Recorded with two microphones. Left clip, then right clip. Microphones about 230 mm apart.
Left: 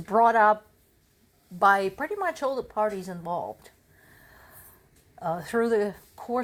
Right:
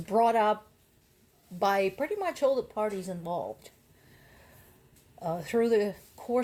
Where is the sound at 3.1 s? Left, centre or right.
Left.